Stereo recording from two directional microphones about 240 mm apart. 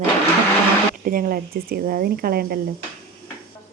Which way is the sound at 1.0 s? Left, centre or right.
Right.